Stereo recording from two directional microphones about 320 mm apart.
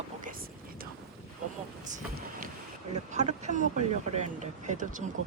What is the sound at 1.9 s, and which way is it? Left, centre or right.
A woman's voice, right.